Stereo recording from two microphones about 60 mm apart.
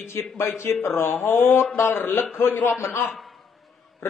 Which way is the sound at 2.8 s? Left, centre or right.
Left.